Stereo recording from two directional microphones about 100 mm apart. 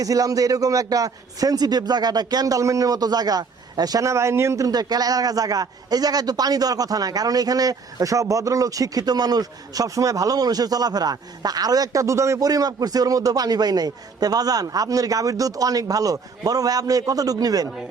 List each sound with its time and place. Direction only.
0.0 s a man's voice: 35° right (ahead or behind)